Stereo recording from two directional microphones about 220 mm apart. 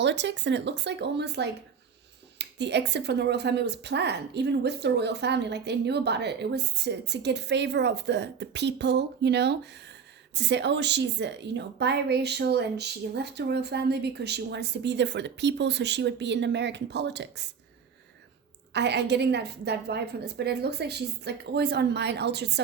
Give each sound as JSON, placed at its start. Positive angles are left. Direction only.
{"t": 0.0, "sound": "speech", "side_deg": -55}
{"t": 18.7, "sound": "speech", "side_deg": -50}